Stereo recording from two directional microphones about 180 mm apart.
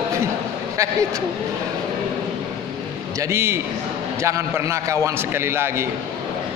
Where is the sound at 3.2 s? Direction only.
15° right (ahead or behind).